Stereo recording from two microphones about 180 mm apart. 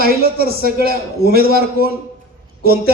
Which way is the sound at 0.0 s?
55° right (ahead or behind).